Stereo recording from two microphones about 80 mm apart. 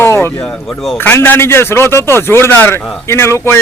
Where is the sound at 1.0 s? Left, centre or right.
Left.